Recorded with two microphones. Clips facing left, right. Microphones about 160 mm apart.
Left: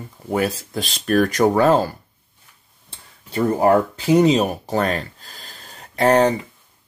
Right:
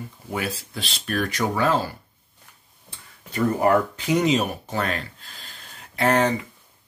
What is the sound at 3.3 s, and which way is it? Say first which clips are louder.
Speech: left 3 dB; 30° left (ahead or behind).